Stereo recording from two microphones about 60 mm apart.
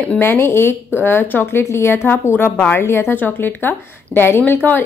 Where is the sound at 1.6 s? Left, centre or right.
Left.